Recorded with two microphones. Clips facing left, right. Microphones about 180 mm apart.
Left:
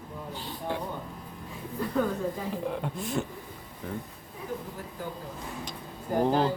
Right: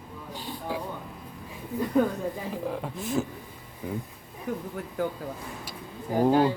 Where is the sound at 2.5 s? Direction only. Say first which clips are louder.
Even; centre (ahead or behind).